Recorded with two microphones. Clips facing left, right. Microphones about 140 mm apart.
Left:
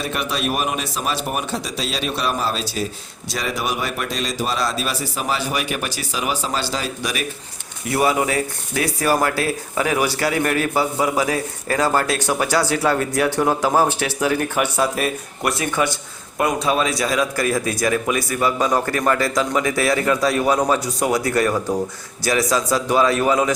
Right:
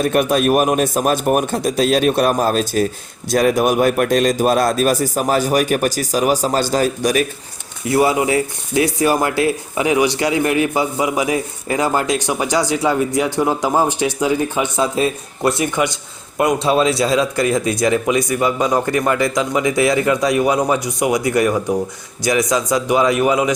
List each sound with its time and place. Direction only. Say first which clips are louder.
0.0 s speech: right 9 dB; 50° right (ahead or behind)
7.9 s speech: right 4 dB; 25° right (ahead or behind)